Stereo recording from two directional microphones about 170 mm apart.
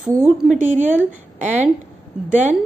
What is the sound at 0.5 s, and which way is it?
Speech, 50° right (ahead or behind).